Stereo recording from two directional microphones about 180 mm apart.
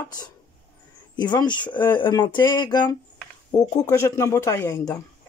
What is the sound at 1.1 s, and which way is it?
Speech, 25° left (ahead or behind).